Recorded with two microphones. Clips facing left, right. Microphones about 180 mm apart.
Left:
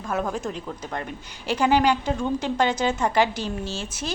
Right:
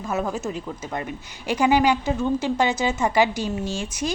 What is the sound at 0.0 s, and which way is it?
A woman's voice, 5° right (ahead or behind).